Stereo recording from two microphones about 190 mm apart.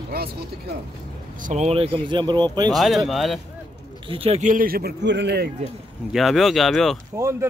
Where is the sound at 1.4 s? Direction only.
35° right (ahead or behind); by 2.7 s 20° right (ahead or behind).